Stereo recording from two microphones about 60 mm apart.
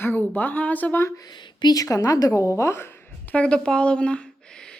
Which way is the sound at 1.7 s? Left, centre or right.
Left.